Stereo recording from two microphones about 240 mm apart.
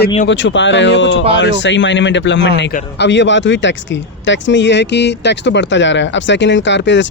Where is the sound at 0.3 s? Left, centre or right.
Left.